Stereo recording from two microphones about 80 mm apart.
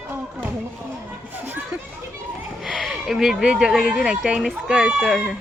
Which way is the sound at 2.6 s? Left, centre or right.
Centre.